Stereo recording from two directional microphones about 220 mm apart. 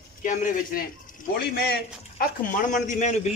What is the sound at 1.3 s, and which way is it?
A man's voice, 45° left (ahead or behind).